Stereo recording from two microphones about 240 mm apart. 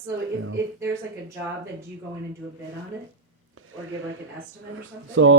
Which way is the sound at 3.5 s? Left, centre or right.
Right.